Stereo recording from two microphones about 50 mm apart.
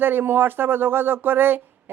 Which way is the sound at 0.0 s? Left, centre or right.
Right.